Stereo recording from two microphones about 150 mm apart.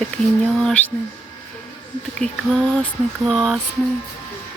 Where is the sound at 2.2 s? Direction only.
45° right (ahead or behind).